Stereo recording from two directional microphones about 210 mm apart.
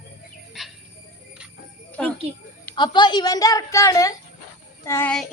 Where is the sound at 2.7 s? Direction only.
20° left (ahead or behind).